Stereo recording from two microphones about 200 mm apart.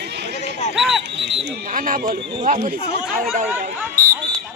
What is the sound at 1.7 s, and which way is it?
Speech, 45° right (ahead or behind).